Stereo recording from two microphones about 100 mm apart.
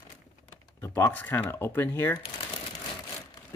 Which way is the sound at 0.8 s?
30° left (ahead or behind).